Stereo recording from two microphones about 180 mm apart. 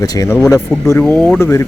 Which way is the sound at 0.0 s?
20° left (ahead or behind).